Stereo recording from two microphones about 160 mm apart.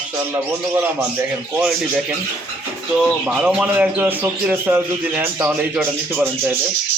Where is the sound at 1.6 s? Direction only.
5° right (ahead or behind).